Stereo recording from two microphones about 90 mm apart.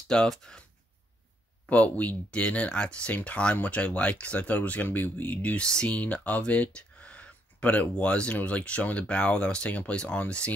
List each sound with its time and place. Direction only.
0.1 s speech: 5° left (ahead or behind)
1.7 s speech: 15° left (ahead or behind)